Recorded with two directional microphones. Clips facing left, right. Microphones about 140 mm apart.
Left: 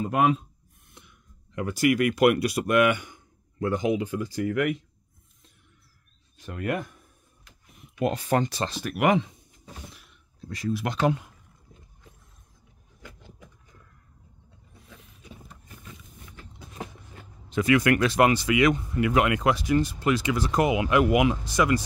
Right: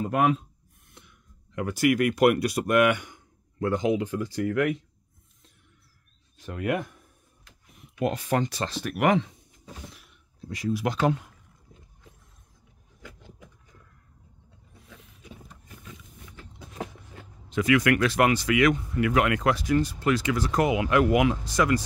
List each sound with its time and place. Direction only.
0.1 s speech: 20° left (ahead or behind)
1.5 s speech: centre (ahead or behind)
6.3 s speech: centre (ahead or behind)
8.0 s speech: 30° left (ahead or behind)
8.8 s speech: 5° left (ahead or behind)
9.9 s a sound: 10° right (ahead or behind)
17.6 s speech: 30° left (ahead or behind)